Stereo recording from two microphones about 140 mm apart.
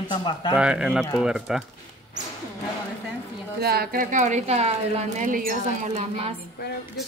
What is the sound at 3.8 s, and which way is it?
Speech, 70° right (ahead or behind).